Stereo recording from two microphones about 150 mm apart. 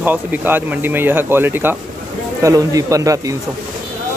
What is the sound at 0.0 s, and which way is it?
Speech, 10° right (ahead or behind).